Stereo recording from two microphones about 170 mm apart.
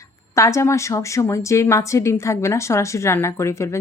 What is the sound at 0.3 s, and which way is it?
A woman's voice, 15° left (ahead or behind).